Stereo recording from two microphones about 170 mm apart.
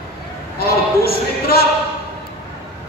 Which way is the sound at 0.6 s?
65° left (ahead or behind).